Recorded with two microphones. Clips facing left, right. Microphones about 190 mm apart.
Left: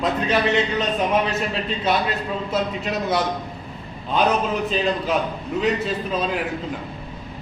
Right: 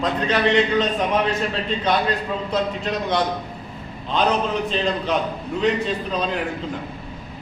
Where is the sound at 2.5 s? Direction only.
5° left (ahead or behind).